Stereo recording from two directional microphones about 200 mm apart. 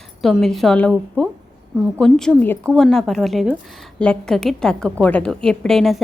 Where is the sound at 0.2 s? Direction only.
Centre (ahead or behind).